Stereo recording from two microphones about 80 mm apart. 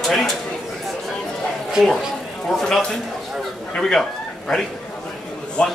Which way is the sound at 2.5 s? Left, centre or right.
Centre.